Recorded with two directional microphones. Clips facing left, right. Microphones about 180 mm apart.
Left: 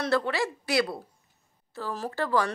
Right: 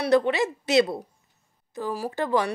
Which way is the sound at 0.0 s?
20° right (ahead or behind).